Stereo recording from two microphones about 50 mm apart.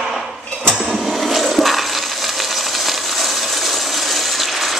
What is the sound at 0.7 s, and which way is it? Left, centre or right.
Toilet flush, centre.